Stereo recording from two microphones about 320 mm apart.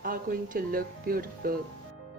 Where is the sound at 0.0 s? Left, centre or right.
Right.